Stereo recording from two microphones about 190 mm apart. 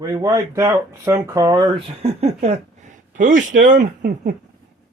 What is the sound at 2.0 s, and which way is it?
Speech, 35° right (ahead or behind).